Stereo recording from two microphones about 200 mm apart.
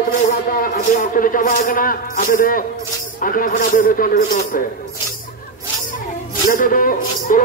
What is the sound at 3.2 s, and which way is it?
A man's voice, 45° left (ahead or behind).